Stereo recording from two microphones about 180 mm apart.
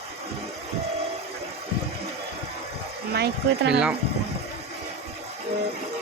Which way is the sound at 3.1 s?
70° right (ahead or behind).